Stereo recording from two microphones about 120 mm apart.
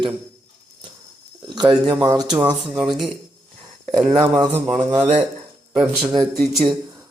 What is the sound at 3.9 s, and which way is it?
Speech, 35° right (ahead or behind).